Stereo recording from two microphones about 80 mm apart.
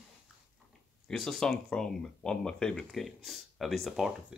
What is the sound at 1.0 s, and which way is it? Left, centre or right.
Speech, centre.